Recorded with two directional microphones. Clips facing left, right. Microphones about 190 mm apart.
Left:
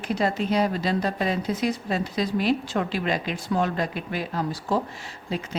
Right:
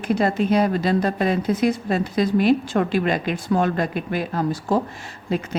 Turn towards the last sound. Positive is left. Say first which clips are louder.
# right 5 dB
turn(degrees=-50)  # may be behind; listen again after turning